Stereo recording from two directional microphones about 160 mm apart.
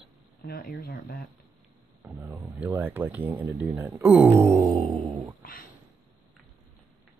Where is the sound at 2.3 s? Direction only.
5° right (ahead or behind).